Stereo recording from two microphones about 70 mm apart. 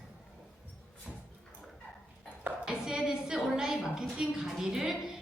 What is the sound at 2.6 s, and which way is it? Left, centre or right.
A woman's voice, centre.